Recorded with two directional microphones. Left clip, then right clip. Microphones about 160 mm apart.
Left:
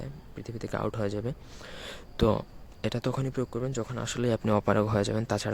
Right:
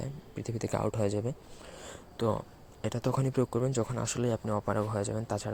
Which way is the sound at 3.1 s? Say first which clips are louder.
Right 2 dB; centre (ahead or behind).